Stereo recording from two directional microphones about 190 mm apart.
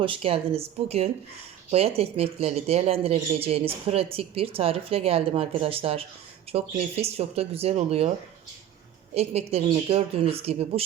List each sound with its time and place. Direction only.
0.0 s speech: 30° right (ahead or behind)
9.1 s speech: 35° right (ahead or behind)